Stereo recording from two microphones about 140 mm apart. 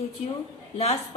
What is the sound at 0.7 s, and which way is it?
Speech, 50° left (ahead or behind).